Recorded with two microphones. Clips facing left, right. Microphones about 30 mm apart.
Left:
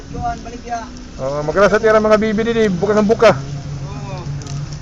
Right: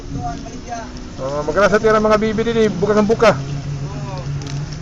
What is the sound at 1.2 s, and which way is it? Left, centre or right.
A man's voice, centre.